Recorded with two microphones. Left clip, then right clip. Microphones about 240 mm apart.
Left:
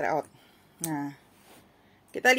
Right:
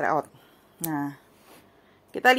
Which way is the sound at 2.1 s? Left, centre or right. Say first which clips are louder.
Right 3 dB; centre.